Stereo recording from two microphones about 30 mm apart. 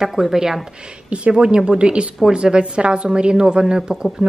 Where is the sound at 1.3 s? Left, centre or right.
Right.